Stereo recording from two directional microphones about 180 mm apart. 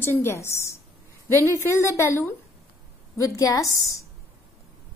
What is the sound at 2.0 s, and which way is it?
A woman's voice, 15° left (ahead or behind).